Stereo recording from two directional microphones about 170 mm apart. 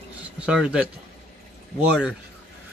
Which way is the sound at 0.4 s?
5° right (ahead or behind).